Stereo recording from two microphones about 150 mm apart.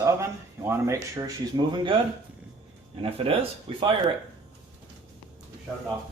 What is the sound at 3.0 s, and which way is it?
Speech, 40° right (ahead or behind).